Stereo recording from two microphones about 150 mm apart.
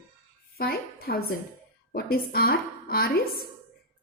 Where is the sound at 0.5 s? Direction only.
90° left.